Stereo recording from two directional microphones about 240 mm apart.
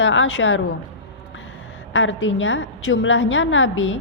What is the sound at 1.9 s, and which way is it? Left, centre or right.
A woman's voice, left.